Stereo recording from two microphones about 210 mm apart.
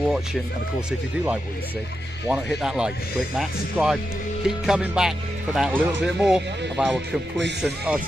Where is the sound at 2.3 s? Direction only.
5° right (ahead or behind).